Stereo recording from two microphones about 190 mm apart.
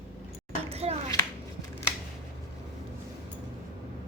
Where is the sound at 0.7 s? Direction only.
30° right (ahead or behind).